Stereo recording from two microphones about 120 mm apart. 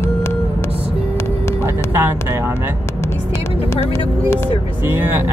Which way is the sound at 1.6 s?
20° right (ahead or behind).